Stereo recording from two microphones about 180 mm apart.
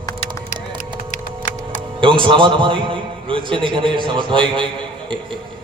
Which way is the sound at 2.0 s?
25° right (ahead or behind).